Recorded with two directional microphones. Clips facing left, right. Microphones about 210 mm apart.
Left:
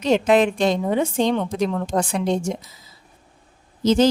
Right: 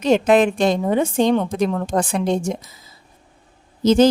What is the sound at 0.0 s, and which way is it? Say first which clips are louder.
A woman's voice: right 2 dB; 50° right (ahead or behind).